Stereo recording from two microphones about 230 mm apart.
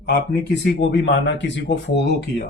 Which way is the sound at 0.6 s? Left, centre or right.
Left.